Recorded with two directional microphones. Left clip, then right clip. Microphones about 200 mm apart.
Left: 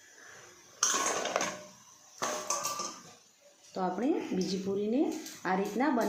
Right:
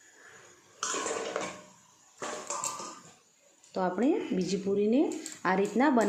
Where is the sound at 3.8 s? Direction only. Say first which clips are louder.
Right 3 dB; 35° right (ahead or behind).